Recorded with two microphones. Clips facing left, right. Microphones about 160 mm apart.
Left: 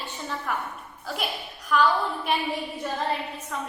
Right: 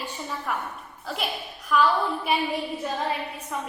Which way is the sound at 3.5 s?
15° right (ahead or behind).